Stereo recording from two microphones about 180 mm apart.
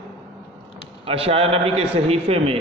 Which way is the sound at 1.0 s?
30° right (ahead or behind).